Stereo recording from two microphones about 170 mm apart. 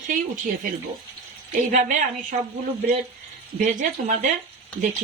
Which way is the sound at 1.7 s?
50° right (ahead or behind).